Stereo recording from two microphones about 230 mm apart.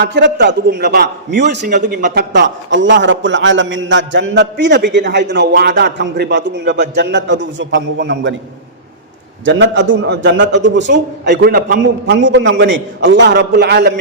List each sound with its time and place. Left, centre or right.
0.0 s a man's voice: right
2.3 s a man's voice: right
9.4 s a man's voice: right